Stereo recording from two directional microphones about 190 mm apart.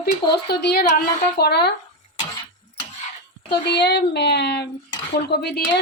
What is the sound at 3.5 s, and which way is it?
A woman's voice, 60° left (ahead or behind).